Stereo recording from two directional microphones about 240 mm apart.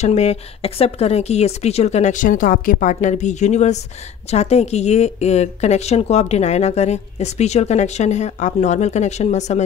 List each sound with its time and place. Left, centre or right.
0.0 s speech: left